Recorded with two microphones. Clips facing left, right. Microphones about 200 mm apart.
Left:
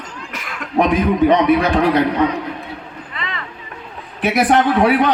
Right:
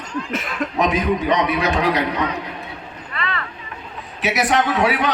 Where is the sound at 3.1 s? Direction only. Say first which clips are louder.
Right 3 dB; 20° left (ahead or behind).